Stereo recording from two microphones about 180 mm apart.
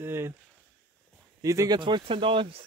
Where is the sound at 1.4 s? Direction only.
20° right (ahead or behind).